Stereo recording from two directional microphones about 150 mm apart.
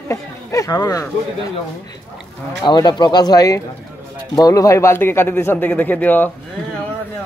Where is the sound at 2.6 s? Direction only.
30° left (ahead or behind); by 6.3 s 10° left (ahead or behind).